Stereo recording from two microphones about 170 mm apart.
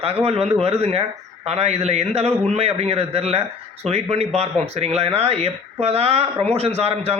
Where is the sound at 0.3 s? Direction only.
35° right (ahead or behind).